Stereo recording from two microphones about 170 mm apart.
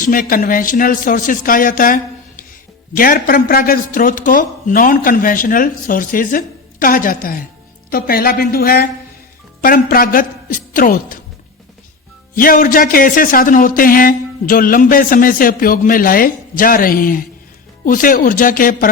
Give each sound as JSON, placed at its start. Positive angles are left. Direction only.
{"t": 0.0, "sound": "a woman's voice", "side_deg": 55}
{"t": 12.4, "sound": "a woman's voice", "side_deg": 55}